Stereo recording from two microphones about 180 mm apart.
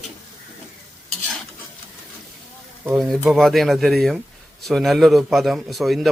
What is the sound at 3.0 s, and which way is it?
A man's voice, centre (ahead or behind).